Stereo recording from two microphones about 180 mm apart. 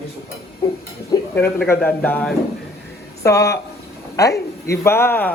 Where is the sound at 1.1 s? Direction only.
15° left (ahead or behind).